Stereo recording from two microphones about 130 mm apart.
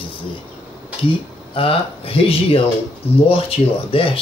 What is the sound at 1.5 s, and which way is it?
Speech, 45° left (ahead or behind).